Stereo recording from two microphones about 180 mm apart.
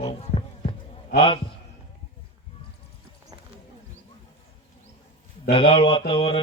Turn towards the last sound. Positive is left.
turn(degrees=30)  # may be behind; listen again after turning